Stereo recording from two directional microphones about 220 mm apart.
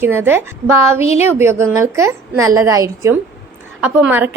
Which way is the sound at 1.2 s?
10° right (ahead or behind).